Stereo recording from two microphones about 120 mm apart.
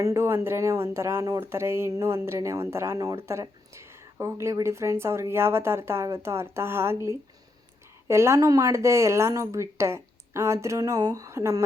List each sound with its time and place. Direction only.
0.0 s speech: 25° right (ahead or behind)